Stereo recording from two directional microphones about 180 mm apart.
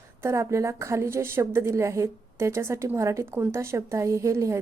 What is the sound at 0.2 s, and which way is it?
A woman's voice, 15° right (ahead or behind).